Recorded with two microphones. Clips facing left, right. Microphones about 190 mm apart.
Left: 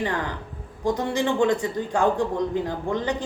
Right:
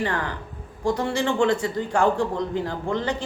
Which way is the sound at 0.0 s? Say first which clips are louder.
Even; 15° left (ahead or behind).